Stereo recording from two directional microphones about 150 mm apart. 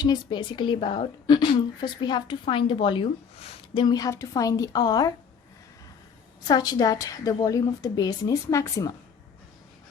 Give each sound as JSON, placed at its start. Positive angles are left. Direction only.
{"t": 0.0, "sound": "a woman's voice", "side_deg": 30}
{"t": 3.8, "sound": "a woman's voice", "side_deg": 25}
{"t": 6.5, "sound": "a woman's voice", "side_deg": 25}